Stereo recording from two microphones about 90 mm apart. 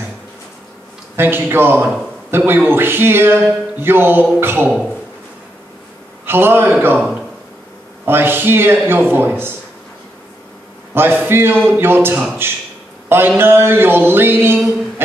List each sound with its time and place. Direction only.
1.1 s a man's voice: 25° right (ahead or behind)
6.2 s a man's voice: 25° right (ahead or behind)
11.0 s a man's voice: 25° right (ahead or behind)